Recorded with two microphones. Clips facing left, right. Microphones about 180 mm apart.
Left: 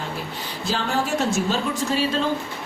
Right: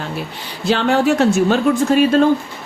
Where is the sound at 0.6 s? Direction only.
70° right (ahead or behind).